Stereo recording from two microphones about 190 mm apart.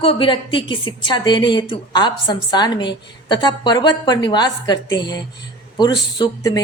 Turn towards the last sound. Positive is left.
turn(degrees=20)  # may be behind; listen again after turning